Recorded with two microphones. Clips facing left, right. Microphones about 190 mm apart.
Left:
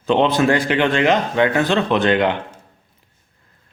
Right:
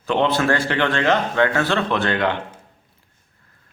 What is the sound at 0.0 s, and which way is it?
Speech, 20° left (ahead or behind).